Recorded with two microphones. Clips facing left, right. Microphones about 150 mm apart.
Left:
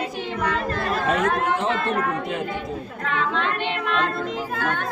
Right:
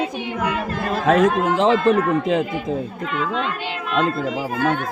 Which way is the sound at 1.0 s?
90° right.